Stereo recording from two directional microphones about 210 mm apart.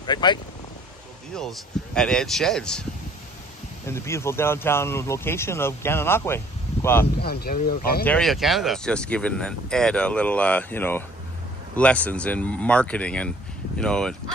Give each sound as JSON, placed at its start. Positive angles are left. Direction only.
{"t": 0.0, "sound": "speech", "side_deg": 20}
{"t": 1.3, "sound": "speech", "side_deg": 0}
{"t": 7.2, "sound": "speech", "side_deg": 50}
{"t": 8.0, "sound": "speech", "side_deg": 5}